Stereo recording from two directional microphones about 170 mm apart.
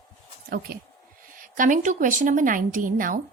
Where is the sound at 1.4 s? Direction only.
50° right (ahead or behind).